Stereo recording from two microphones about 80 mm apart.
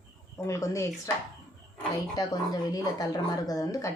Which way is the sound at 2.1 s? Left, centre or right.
Left.